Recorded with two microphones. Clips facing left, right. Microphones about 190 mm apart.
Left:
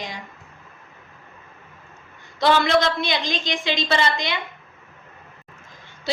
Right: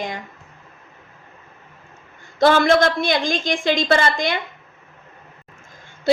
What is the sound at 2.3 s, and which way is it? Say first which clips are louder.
A woman's voice: right 4 dB; 50° right (ahead or behind).